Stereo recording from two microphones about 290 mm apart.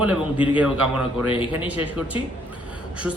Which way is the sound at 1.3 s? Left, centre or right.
Centre.